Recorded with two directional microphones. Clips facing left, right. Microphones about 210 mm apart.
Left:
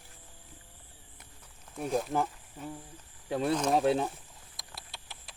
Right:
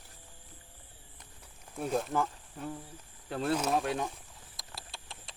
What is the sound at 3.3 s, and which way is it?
Speech, 10° left (ahead or behind).